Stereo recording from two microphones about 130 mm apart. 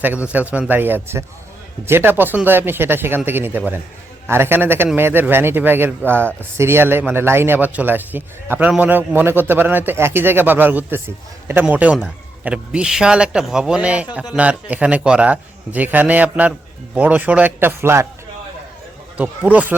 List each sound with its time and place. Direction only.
0.3 s speech: 10° right (ahead or behind)
19.1 s speech: 10° right (ahead or behind)